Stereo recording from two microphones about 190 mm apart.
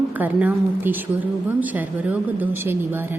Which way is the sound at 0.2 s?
10° right (ahead or behind).